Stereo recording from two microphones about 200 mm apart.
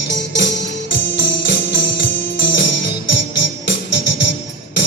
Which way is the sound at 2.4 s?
65° left (ahead or behind).